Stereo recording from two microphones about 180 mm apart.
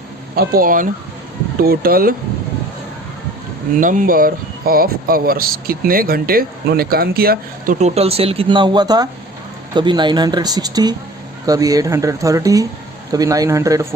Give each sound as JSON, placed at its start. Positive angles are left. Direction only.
{"t": 0.3, "sound": "speech", "side_deg": -55}
{"t": 3.8, "sound": "speech", "side_deg": -45}